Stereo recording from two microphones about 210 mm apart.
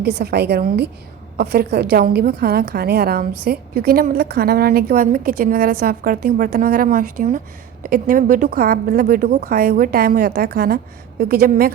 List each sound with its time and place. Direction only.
0.0 s a woman's voice: 50° right (ahead or behind)